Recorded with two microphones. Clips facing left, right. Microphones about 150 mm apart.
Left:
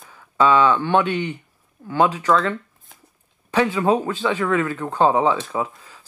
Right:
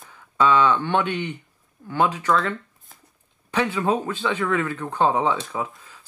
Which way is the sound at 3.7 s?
10° left (ahead or behind).